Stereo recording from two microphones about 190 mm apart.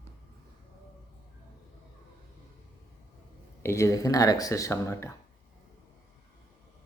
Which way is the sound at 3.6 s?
15° left (ahead or behind).